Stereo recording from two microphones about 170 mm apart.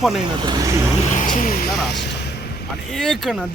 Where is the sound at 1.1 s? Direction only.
50° left (ahead or behind).